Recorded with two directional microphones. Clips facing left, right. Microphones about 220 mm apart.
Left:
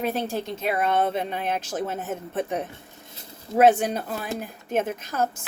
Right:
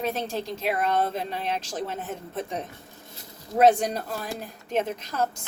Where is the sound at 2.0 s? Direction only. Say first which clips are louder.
Left 4 dB; 45° left (ahead or behind).